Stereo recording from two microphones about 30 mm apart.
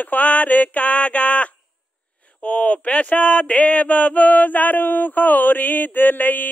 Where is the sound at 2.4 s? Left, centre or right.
Left.